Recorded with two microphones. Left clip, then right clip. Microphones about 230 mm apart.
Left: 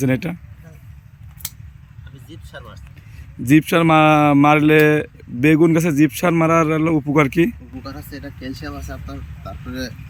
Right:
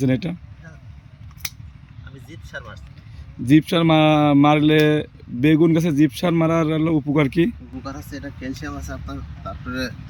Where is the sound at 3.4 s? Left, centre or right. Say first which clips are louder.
Left 2 dB; centre.